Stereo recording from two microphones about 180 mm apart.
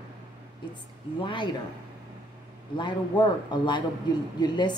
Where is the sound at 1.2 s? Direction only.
25° left (ahead or behind).